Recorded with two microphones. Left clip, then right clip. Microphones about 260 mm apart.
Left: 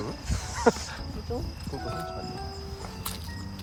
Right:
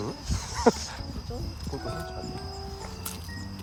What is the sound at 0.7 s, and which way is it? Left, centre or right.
Speech, right.